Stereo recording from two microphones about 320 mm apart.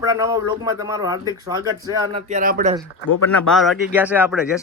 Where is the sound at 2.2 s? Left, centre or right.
Right.